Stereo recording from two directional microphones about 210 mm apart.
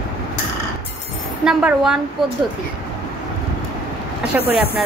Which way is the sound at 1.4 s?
5° right (ahead or behind).